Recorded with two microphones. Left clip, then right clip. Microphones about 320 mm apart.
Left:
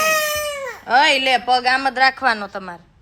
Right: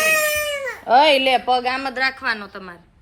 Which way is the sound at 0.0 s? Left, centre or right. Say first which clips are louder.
Even; centre.